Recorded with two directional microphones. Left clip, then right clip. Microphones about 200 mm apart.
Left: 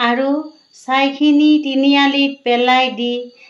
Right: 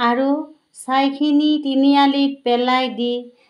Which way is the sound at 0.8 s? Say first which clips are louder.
Left 3 dB; 40° right (ahead or behind).